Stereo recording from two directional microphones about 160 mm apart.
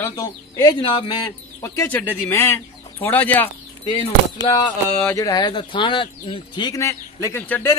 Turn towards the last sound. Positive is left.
turn(degrees=10)  # may be behind; listen again after turning